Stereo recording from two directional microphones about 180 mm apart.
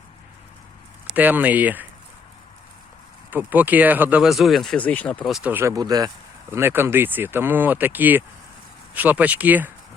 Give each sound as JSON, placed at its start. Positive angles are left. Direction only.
{"t": 1.0, "sound": "speech", "side_deg": -10}
{"t": 3.2, "sound": "speech", "side_deg": -10}